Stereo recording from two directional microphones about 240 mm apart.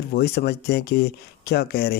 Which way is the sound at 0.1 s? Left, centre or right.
Left.